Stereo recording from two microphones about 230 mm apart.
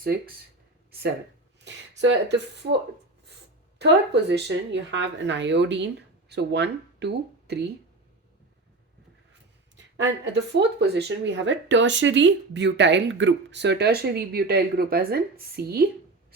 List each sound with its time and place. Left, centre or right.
0.9 s a sound: right
1.6 s speech: right
3.8 s speech: right
9.7 s speech: right